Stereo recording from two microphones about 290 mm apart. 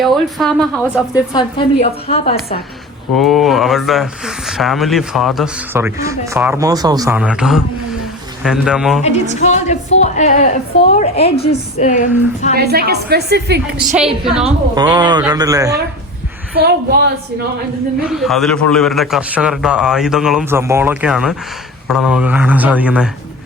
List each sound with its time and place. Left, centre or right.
0.0 s speech: centre
1.1 s a woman's voice: centre
3.2 s speech: centre
9.0 s a woman's voice: left
12.5 s a woman's voice: right
14.4 s speech: centre
16.6 s a woman's voice: right
18.0 s speech: centre